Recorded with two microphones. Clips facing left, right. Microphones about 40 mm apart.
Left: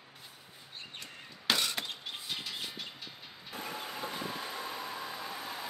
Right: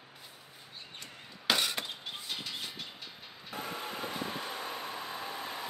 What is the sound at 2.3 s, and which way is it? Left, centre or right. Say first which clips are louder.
Bird: even; centre.